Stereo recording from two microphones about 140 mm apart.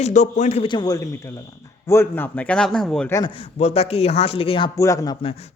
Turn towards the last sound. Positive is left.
turn(degrees=25)  # may be behind; listen again after turning